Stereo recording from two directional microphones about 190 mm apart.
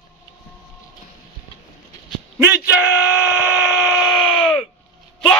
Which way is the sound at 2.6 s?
10° right (ahead or behind).